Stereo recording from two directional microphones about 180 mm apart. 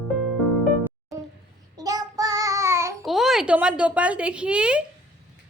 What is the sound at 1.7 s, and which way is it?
Child singing, 20° right (ahead or behind).